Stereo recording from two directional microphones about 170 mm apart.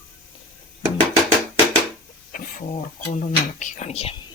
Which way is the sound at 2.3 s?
50° left (ahead or behind).